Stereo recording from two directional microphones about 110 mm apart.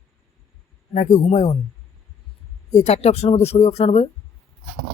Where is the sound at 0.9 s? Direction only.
90° left.